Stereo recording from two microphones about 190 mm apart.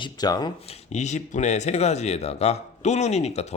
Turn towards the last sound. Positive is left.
turn(degrees=35)  # may be behind; listen again after turning